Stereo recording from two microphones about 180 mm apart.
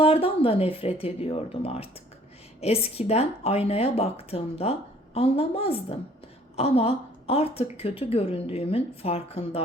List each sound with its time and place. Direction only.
0.0 s speech: 30° left (ahead or behind)